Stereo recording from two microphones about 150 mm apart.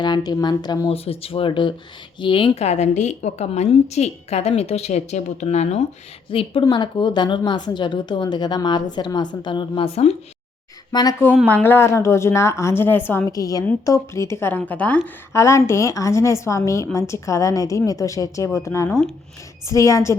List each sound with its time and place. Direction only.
0.0 s a woman's voice: 25° left (ahead or behind)
0.9 s a woman's voice: 40° left (ahead or behind)
10.9 s a woman's voice: 30° left (ahead or behind)
11.4 s a woman's voice: 10° left (ahead or behind)